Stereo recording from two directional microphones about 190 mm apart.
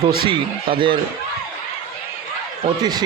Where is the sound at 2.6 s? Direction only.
20° right (ahead or behind).